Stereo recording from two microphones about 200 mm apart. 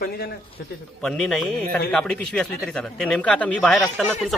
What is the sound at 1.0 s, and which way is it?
Speech, 5° left (ahead or behind).